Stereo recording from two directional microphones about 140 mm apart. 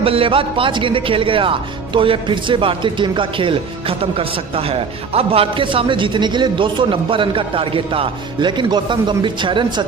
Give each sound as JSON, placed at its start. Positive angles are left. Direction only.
{"t": 0.0, "sound": "speech", "side_deg": -40}